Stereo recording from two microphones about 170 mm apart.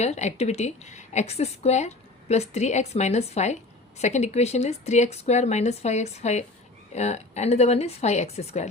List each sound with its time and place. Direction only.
0.0 s a woman's voice: 40° left (ahead or behind)